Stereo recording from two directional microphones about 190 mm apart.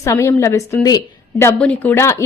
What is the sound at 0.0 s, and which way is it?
A woman's voice, 15° left (ahead or behind).